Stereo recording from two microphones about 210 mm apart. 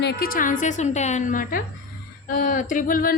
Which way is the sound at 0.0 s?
50° left (ahead or behind).